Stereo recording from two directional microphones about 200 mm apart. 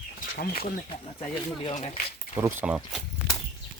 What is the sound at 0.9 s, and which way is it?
Speech, 25° left (ahead or behind).